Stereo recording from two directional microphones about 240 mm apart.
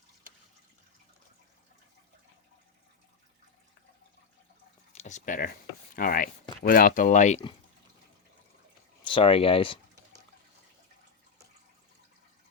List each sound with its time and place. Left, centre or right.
4.9 s speech: left
9.0 s speech: left